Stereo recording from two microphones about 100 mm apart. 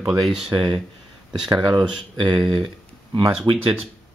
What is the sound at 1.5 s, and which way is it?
Speech, 50° right (ahead or behind).